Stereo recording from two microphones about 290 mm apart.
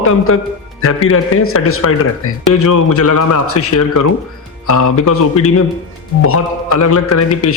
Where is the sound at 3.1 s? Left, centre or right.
Left.